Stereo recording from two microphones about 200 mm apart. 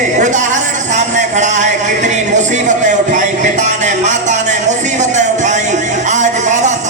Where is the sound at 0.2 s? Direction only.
40° right (ahead or behind).